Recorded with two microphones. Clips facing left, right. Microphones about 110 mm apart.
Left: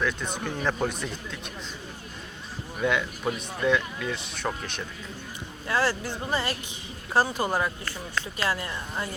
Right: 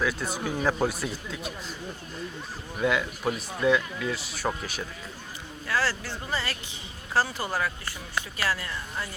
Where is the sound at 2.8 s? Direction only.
5° right (ahead or behind).